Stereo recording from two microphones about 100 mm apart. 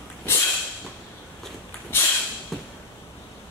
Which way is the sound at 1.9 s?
20° left (ahead or behind).